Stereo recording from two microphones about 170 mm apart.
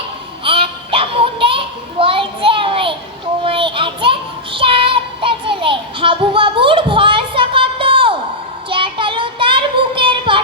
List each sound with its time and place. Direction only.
0.4 s child singing: 30° right (ahead or behind)